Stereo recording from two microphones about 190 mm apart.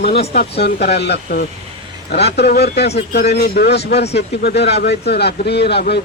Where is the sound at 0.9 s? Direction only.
60° left (ahead or behind).